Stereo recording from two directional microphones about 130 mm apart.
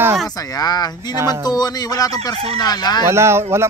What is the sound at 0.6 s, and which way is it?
Speech, 30° left (ahead or behind).